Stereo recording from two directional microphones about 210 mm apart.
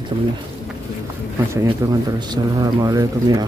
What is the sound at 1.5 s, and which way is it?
Speech, 15° right (ahead or behind).